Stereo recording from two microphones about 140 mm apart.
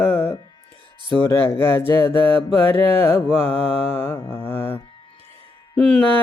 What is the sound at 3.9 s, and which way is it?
Mantra, 15° left (ahead or behind).